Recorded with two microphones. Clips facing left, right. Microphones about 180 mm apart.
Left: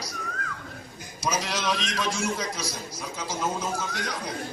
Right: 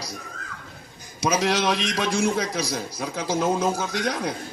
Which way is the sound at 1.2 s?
65° right (ahead or behind).